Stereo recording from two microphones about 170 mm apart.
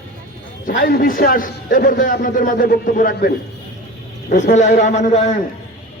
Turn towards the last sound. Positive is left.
turn(degrees=45)  # may be behind; listen again after turning